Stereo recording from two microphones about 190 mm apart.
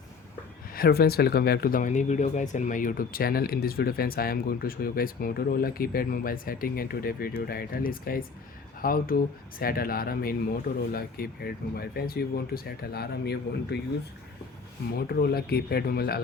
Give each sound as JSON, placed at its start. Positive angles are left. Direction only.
{"t": 0.7, "sound": "speech", "side_deg": 55}
{"t": 14.9, "sound": "speech", "side_deg": 55}